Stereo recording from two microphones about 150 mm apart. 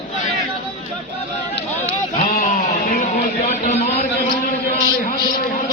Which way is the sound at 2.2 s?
55° left (ahead or behind).